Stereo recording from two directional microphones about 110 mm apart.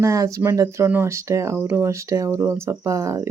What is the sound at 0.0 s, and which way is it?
Speech, 30° right (ahead or behind).